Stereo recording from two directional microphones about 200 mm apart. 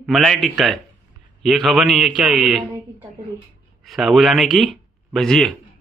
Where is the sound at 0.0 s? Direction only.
Centre (ahead or behind).